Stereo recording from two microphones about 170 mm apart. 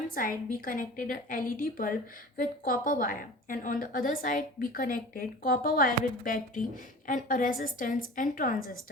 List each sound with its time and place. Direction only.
0.1 s a woman's voice: 55° left (ahead or behind)